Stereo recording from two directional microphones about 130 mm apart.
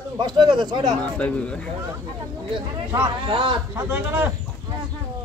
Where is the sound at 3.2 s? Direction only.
40° right (ahead or behind).